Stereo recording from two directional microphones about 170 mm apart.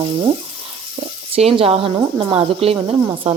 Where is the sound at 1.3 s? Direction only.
35° right (ahead or behind).